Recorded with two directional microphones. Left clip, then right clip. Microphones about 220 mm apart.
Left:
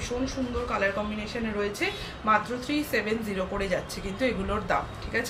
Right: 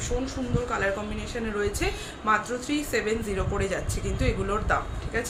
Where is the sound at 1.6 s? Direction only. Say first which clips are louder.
Even; 15° right (ahead or behind).